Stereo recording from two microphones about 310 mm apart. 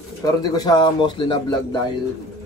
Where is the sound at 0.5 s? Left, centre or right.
Centre.